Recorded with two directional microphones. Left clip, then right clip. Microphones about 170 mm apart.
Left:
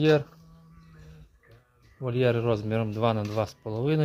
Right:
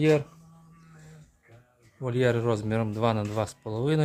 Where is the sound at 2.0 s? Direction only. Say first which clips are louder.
Even; centre (ahead or behind).